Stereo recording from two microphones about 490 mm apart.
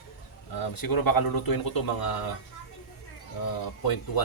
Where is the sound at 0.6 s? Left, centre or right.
Left.